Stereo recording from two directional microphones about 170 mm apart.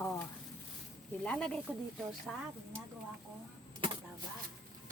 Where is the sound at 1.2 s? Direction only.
5° left (ahead or behind).